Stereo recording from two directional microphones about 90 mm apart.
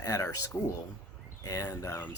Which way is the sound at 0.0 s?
40° left (ahead or behind).